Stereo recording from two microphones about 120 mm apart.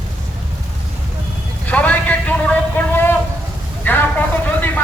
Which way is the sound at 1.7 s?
10° left (ahead or behind).